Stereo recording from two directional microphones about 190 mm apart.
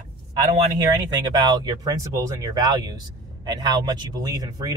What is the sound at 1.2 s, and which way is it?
Speech, 25° right (ahead or behind).